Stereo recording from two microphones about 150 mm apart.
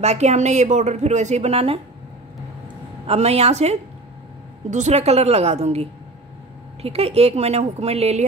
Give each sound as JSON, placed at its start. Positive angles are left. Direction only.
{"t": 0.0, "sound": "a woman's voice", "side_deg": -45}
{"t": 3.1, "sound": "a woman's voice", "side_deg": -45}